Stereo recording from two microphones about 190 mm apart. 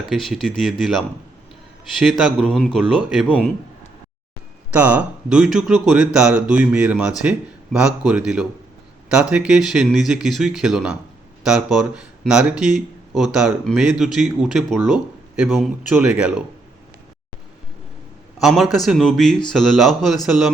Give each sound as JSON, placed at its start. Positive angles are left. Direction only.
{"t": 0.0, "sound": "speech", "side_deg": 0}
{"t": 2.0, "sound": "speech", "side_deg": 0}
{"t": 4.7, "sound": "speech", "side_deg": -10}
{"t": 18.3, "sound": "a man's voice", "side_deg": 0}